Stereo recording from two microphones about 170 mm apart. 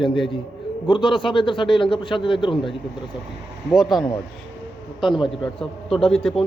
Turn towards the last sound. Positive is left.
turn(degrees=5)  # may be behind; listen again after turning